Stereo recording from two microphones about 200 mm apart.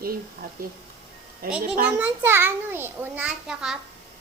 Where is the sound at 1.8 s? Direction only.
10° right (ahead or behind).